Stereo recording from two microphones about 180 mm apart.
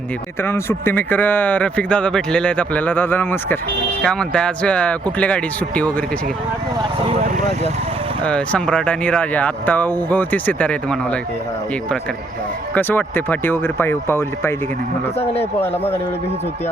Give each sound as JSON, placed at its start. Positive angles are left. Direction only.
{"t": 0.4, "sound": "speech", "side_deg": 15}
{"t": 7.1, "sound": "speech", "side_deg": -35}
{"t": 8.2, "sound": "speech", "side_deg": 5}
{"t": 12.7, "sound": "speech", "side_deg": 10}
{"t": 15.2, "sound": "a man's voice", "side_deg": 35}
{"t": 15.6, "sound": "speech", "side_deg": 10}